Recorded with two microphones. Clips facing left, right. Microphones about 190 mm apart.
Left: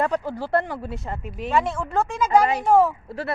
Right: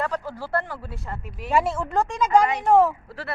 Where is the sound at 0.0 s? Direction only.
20° left (ahead or behind).